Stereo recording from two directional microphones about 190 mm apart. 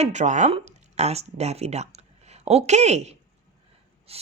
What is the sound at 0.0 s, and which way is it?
Speech, 40° right (ahead or behind).